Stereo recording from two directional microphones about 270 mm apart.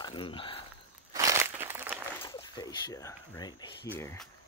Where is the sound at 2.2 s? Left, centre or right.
Centre.